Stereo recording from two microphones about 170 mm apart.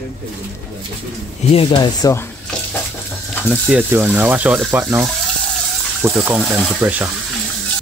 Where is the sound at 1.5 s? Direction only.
35° left (ahead or behind).